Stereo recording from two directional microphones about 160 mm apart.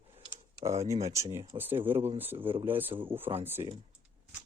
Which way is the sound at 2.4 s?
30° right (ahead or behind).